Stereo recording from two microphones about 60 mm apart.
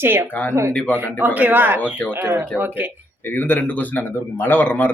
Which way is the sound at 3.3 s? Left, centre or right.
Left.